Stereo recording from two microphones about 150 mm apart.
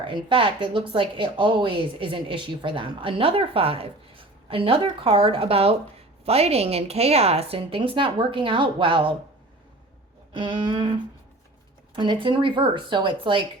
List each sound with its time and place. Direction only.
0.0 s speech: 35° right (ahead or behind)
10.3 s speech: 35° right (ahead or behind)
11.9 s speech: 35° right (ahead or behind)